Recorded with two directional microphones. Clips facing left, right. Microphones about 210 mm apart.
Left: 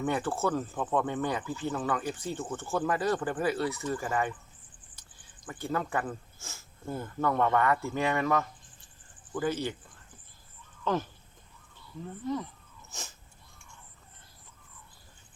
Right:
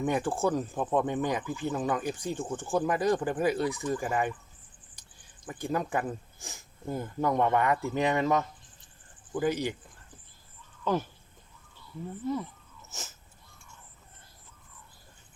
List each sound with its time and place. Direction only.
0.0 s speech: 15° right (ahead or behind)
5.5 s speech: 15° right (ahead or behind)
12.2 s speech: 5° right (ahead or behind)
12.9 s wheeze: 5° right (ahead or behind)